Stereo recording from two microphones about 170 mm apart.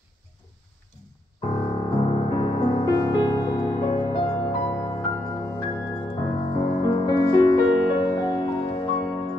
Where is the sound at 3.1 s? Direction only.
25° left (ahead or behind).